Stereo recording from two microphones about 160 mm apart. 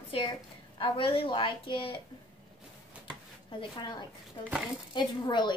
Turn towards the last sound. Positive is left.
turn(degrees=30)  # may be behind; listen again after turning